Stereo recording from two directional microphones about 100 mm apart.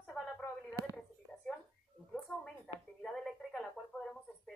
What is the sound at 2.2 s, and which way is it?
A woman's voice, centre (ahead or behind).